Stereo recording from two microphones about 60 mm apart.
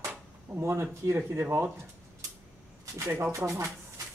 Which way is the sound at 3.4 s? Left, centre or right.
Right.